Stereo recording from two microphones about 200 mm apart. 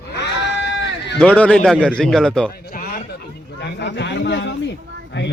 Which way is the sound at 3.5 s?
55° left (ahead or behind).